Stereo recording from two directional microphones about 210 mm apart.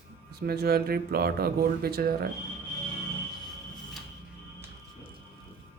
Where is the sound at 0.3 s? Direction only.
50° right (ahead or behind).